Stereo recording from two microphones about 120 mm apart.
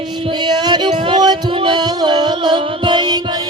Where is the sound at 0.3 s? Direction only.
40° right (ahead or behind).